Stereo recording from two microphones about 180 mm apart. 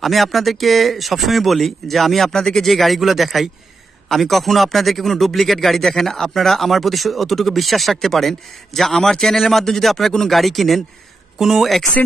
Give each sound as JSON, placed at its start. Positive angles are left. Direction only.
{"t": 0.0, "sound": "speech", "side_deg": 0}